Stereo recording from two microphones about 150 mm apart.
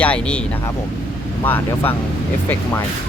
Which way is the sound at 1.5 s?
15° left (ahead or behind).